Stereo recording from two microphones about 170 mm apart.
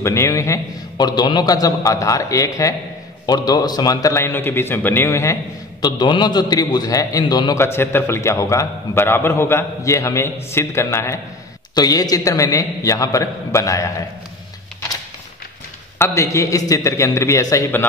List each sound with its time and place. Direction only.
0.0 s a man's voice: 15° left (ahead or behind)
16.0 s a man's voice: 15° left (ahead or behind)